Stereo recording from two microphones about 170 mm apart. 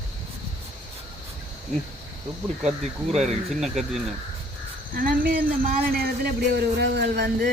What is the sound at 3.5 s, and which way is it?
Speech, centre (ahead or behind).